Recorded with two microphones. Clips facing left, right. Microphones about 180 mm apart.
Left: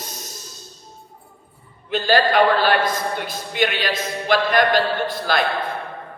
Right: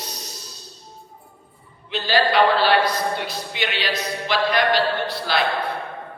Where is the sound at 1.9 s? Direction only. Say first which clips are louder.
Left 3 dB; 50° left (ahead or behind).